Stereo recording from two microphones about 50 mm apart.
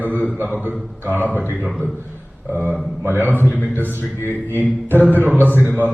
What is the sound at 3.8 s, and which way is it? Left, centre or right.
Speech, left.